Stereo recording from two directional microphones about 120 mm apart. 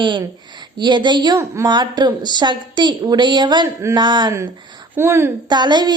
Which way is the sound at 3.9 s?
40° right (ahead or behind).